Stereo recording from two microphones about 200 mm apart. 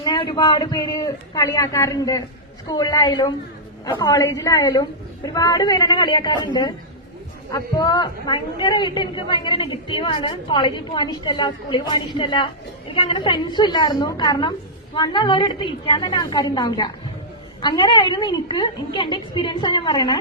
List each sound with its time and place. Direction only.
0.0 s a woman's voice: 20° left (ahead or behind)